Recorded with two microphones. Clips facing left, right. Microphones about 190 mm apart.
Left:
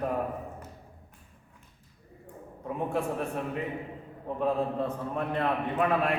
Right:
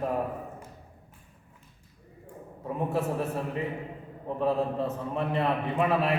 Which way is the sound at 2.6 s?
5° right (ahead or behind).